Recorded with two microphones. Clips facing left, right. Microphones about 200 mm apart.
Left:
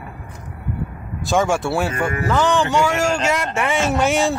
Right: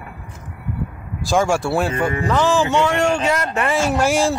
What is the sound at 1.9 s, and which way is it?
Honk, 25° right (ahead or behind).